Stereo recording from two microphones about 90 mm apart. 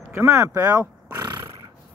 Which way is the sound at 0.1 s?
30° right (ahead or behind).